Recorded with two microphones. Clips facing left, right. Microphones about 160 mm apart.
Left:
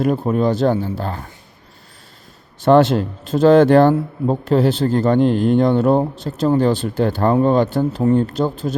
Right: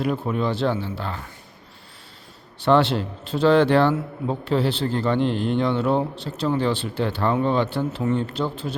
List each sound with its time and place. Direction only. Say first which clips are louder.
0.0 s speech: left 6 dB; 45° left (ahead or behind)
2.6 s speech: left 6 dB; 45° left (ahead or behind)